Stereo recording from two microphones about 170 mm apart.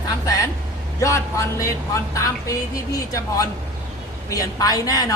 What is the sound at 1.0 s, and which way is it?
A woman's voice, 20° left (ahead or behind).